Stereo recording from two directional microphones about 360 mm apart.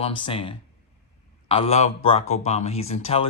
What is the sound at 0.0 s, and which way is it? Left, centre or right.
Speech, centre.